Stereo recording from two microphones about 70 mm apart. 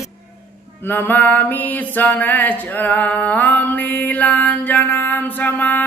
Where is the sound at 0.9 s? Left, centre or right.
Left.